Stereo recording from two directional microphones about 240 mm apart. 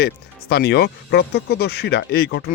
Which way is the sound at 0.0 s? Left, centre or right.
Left.